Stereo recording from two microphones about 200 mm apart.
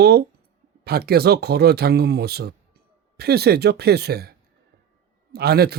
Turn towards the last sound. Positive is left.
turn(degrees=-50)  # may be behind; listen again after turning